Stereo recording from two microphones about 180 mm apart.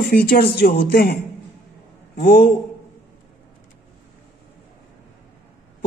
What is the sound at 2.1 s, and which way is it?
Speech, 60° left (ahead or behind).